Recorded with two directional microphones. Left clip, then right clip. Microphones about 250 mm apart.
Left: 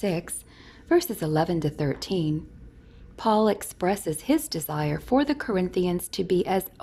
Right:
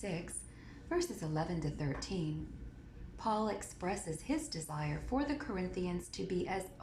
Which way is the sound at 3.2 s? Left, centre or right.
Left.